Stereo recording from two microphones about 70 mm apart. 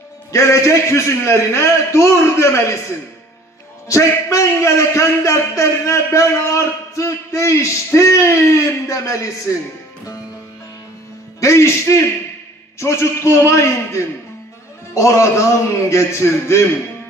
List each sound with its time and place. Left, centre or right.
0.3 s a man's voice: left
3.9 s a man's voice: left
11.4 s a man's voice: left